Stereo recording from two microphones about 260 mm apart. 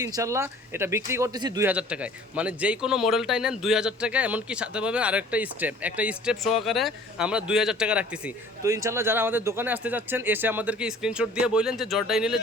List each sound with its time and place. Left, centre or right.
0.0 s speech: centre